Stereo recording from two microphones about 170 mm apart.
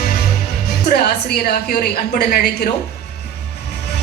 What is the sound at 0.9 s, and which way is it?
A woman's voice, 70° left (ahead or behind).